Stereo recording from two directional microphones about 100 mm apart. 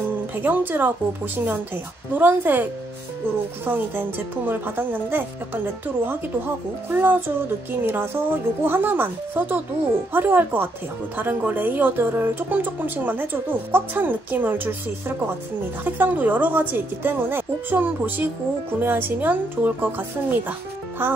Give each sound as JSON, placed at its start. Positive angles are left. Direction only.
{"t": 0.4, "sound": "a woman's voice", "side_deg": -20}
{"t": 6.9, "sound": "a woman's voice", "side_deg": -20}